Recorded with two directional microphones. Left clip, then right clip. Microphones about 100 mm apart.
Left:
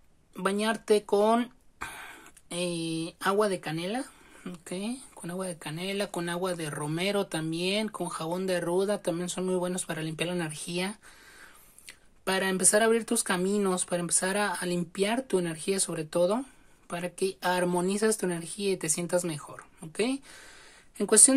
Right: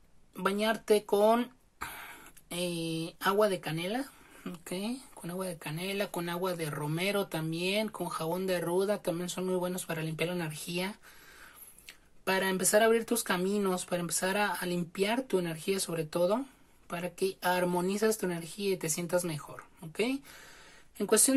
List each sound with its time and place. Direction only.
0.4 s speech: 45° left (ahead or behind)
4.4 s a woman's voice: 25° left (ahead or behind); by 21.4 s 55° left (ahead or behind)